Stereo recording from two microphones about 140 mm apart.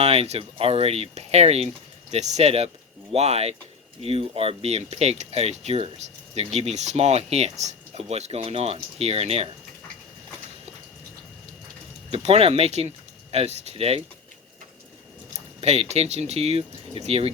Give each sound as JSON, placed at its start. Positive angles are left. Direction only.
{"t": 0.0, "sound": "speech", "side_deg": -45}
{"t": 12.1, "sound": "speech", "side_deg": -45}
{"t": 15.6, "sound": "speech", "side_deg": -50}